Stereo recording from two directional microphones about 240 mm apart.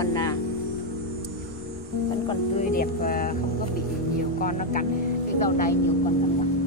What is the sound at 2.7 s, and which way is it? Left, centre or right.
Speech, left.